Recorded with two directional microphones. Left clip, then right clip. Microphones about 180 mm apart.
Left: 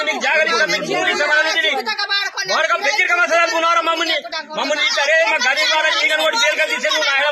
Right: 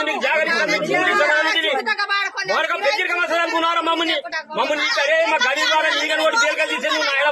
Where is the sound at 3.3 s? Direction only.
90° right.